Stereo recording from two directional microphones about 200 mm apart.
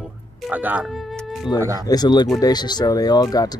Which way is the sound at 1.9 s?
20° left (ahead or behind).